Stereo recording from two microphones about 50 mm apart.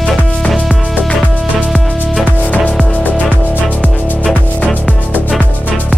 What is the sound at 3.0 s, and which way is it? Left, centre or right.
Music, left.